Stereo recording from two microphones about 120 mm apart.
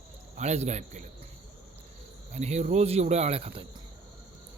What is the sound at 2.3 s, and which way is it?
Speech, 65° right (ahead or behind).